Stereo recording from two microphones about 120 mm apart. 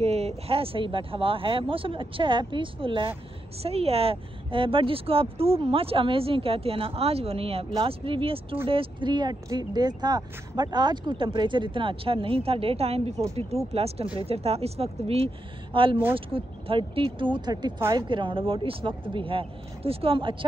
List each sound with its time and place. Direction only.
0.0 s speech: 60° right (ahead or behind); by 3.1 s 45° right (ahead or behind)
3.6 s speech: 55° right (ahead or behind)